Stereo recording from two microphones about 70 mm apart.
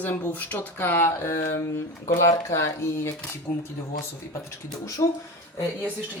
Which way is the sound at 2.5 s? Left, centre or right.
Left.